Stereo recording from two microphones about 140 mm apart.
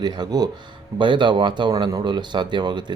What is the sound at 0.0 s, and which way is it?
Speech, 30° right (ahead or behind).